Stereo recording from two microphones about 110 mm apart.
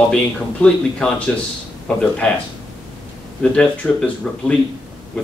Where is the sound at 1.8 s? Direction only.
10° left (ahead or behind).